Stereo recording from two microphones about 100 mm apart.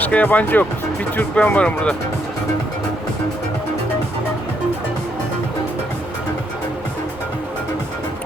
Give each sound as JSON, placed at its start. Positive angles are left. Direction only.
{"t": 0.0, "sound": "speech", "side_deg": 15}